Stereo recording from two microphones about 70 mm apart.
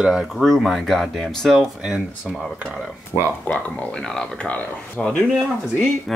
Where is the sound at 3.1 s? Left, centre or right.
Left.